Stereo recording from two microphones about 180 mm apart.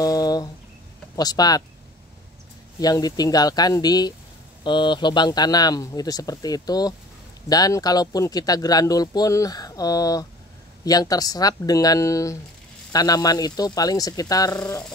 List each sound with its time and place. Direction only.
0.0 s a sound: 20° left (ahead or behind)
1.1 s speech: 20° left (ahead or behind)
2.8 s speech: 20° left (ahead or behind)